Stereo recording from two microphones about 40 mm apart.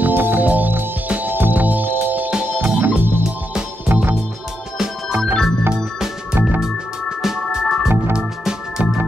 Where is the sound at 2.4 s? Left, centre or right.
Right.